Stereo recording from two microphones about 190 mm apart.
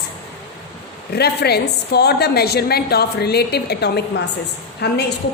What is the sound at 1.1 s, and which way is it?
A woman's voice, 60° left (ahead or behind).